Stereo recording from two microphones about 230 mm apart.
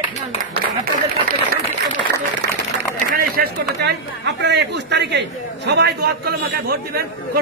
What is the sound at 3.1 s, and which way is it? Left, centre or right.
A man's voice, right.